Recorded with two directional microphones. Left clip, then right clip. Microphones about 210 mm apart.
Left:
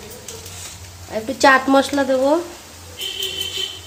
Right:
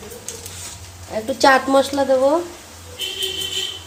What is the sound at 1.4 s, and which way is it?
Speech, 15° left (ahead or behind).